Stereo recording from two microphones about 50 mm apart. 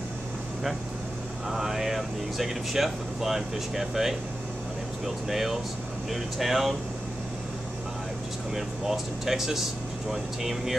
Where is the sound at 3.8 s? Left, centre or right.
Centre.